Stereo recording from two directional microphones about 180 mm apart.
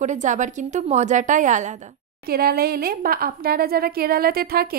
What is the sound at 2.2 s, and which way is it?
A woman's voice, 55° right (ahead or behind).